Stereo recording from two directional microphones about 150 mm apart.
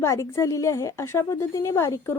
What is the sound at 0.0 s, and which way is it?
A woman's voice, 20° left (ahead or behind).